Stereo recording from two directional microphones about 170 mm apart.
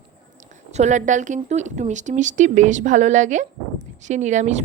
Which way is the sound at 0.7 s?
45° right (ahead or behind).